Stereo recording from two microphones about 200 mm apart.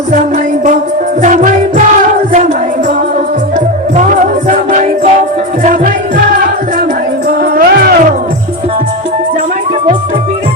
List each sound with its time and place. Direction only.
1.2 s music: 40° right (ahead or behind)
3.9 s music: 40° right (ahead or behind)
7.5 s music: 50° right (ahead or behind)